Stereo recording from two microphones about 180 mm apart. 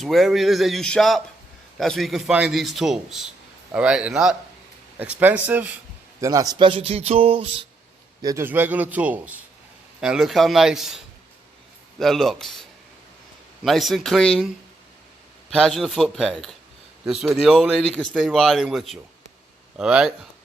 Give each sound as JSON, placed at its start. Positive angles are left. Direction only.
{"t": 0.0, "sound": "a man's voice", "side_deg": 0}
{"t": 8.2, "sound": "a man's voice", "side_deg": -20}
{"t": 13.7, "sound": "a man's voice", "side_deg": 0}